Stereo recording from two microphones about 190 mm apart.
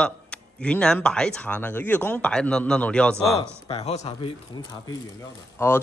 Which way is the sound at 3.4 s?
30° left (ahead or behind).